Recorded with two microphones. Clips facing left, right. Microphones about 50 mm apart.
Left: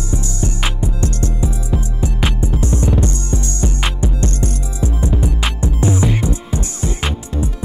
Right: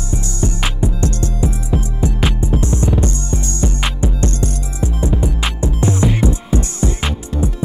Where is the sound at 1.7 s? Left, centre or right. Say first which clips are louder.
Right 2 dB; centre.